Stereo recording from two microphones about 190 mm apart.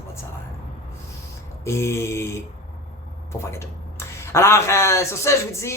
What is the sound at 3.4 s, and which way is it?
Speech, 15° left (ahead or behind).